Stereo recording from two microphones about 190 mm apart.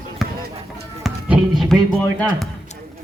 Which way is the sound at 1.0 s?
Centre (ahead or behind).